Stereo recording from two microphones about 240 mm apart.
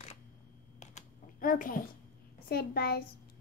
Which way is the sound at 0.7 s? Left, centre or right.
Left.